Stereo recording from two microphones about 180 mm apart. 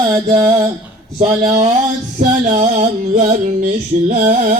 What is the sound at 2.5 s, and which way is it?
Music, 40° right (ahead or behind).